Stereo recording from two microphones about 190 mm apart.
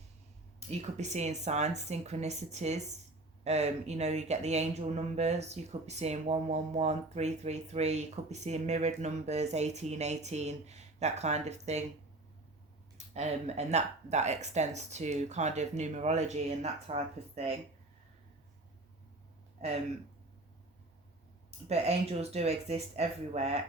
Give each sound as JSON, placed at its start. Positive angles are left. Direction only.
{"t": 0.7, "sound": "speech", "side_deg": -35}
{"t": 13.0, "sound": "speech", "side_deg": -35}
{"t": 21.7, "sound": "speech", "side_deg": -35}